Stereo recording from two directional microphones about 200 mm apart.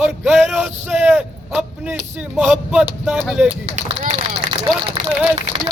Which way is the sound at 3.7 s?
30° right (ahead or behind).